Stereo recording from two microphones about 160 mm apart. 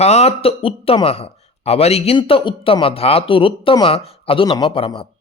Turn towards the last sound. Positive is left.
turn(degrees=35)  # may be behind; listen again after turning